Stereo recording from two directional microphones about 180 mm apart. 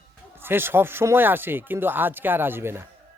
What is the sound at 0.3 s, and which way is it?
Speech, 10° right (ahead or behind).